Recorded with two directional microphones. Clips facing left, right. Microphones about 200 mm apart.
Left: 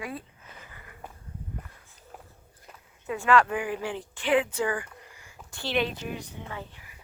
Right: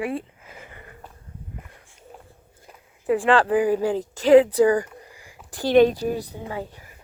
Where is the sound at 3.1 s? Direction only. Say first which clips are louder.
Right 5 dB; 30° right (ahead or behind).